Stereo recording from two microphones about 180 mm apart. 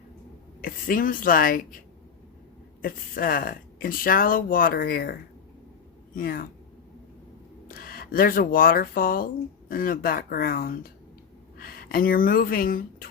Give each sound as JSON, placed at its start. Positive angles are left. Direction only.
{"t": 0.6, "sound": "speech", "side_deg": 50}
{"t": 2.8, "sound": "speech", "side_deg": 50}
{"t": 6.1, "sound": "speech", "side_deg": 55}
{"t": 7.7, "sound": "speech", "side_deg": 55}